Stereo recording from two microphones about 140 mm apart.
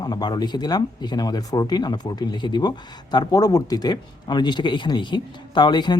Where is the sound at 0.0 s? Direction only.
30° left (ahead or behind).